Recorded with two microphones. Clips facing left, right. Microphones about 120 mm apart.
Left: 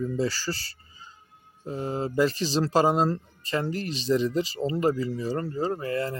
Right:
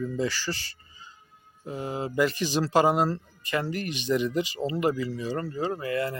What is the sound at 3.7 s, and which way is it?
Speech, 35° left (ahead or behind).